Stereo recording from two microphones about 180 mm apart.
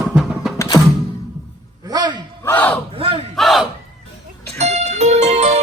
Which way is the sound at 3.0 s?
30° right (ahead or behind).